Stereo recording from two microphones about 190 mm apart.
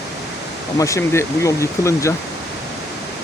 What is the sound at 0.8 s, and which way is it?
Speech, 15° left (ahead or behind).